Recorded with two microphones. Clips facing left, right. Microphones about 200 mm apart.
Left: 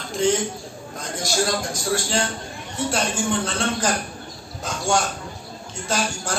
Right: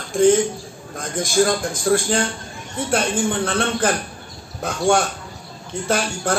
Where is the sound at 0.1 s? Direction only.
50° right (ahead or behind).